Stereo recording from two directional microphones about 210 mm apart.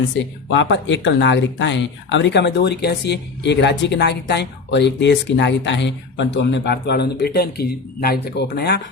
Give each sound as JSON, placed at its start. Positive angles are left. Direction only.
{"t": 0.1, "sound": "speech", "side_deg": 60}